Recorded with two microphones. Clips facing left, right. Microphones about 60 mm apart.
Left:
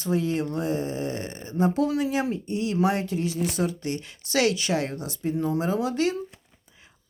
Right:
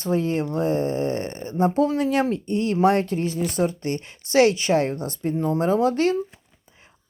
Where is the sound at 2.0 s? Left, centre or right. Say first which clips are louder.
Right 5 dB; right.